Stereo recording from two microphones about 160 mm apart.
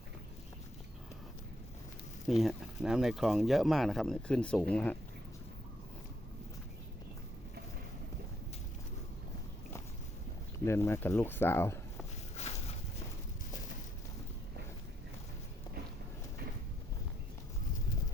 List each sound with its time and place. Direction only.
2.2 s speech: centre (ahead or behind)
10.7 s speech: 15° left (ahead or behind)
12.4 s a sound: 40° left (ahead or behind)